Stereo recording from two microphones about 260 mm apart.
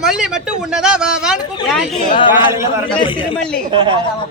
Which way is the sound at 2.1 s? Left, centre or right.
Centre.